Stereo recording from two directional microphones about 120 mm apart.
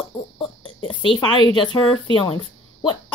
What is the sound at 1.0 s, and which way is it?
A woman's voice, 45° left (ahead or behind).